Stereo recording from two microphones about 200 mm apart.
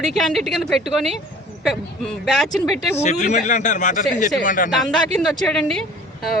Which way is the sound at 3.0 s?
35° left (ahead or behind).